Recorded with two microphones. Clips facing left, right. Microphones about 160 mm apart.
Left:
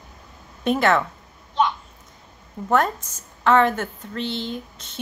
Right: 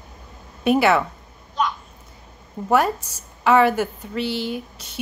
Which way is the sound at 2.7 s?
10° right (ahead or behind).